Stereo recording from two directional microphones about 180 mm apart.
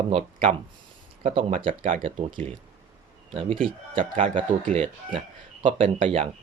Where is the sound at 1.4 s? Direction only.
50° right (ahead or behind).